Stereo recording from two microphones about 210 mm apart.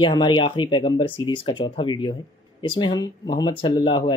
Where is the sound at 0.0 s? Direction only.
25° left (ahead or behind).